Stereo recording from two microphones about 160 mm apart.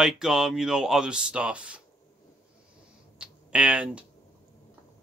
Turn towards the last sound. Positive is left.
turn(degrees=-5)  # may be behind; listen again after turning